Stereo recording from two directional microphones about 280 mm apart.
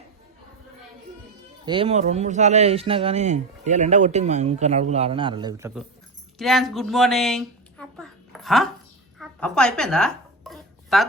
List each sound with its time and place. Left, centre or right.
1.6 s speech: centre
6.4 s a woman's voice: centre
9.1 s a sound: centre